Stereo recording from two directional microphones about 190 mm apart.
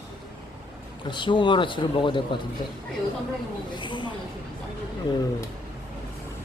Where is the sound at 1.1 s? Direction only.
25° left (ahead or behind).